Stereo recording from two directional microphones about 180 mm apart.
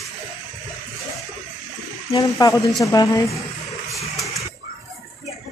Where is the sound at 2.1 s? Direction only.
20° left (ahead or behind).